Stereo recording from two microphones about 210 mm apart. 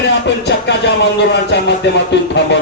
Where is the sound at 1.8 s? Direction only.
55° left (ahead or behind).